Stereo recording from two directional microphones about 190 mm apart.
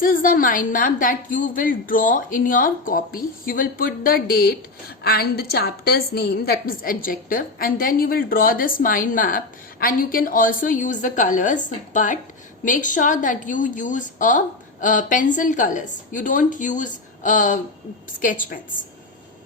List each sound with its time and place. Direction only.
0.0 s a woman's voice: 50° left (ahead or behind)